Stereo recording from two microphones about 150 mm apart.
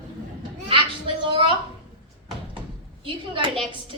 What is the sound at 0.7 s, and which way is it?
Children playing, 35° right (ahead or behind).